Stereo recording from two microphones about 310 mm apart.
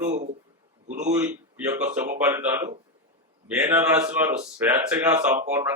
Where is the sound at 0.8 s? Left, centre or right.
Right.